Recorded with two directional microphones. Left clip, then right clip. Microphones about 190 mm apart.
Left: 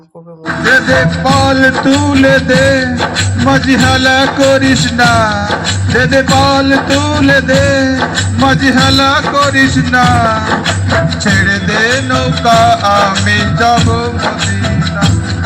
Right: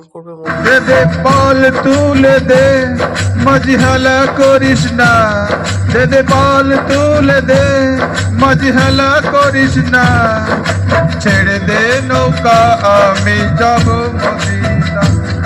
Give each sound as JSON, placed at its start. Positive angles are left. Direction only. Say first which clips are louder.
{"t": 0.6, "sound": "music", "louder": "even", "side_deg": -30}